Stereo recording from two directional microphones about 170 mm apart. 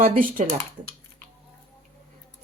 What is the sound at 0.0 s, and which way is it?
Speech, 55° right (ahead or behind).